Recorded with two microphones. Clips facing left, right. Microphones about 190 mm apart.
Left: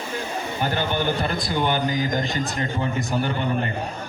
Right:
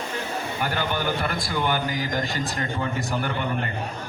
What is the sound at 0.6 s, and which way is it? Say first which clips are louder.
A man's voice: left 3 dB; 25° left (ahead or behind).